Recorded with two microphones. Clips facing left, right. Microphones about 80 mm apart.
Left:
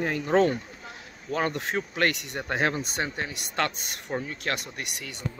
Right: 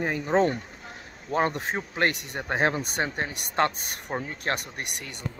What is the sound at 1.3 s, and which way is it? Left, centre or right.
Speech, right.